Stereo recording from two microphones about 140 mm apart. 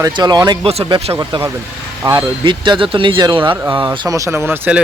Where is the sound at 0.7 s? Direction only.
40° right (ahead or behind).